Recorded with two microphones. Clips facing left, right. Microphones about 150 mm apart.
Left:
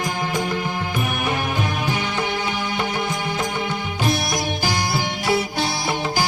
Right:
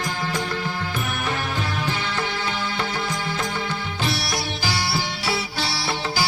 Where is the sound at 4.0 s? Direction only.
45° left (ahead or behind).